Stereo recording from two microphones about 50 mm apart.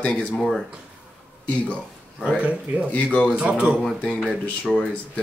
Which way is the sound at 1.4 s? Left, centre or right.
Left.